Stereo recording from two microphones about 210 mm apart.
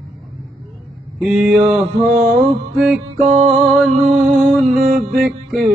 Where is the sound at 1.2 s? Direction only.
Centre (ahead or behind).